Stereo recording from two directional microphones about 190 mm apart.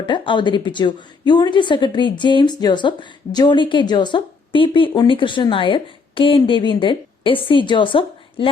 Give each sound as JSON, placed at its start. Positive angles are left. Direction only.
{"t": 0.0, "sound": "a woman's voice", "side_deg": 25}